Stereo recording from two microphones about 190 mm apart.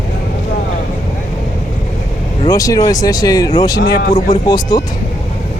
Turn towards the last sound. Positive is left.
turn(degrees=20)  # may be behind; listen again after turning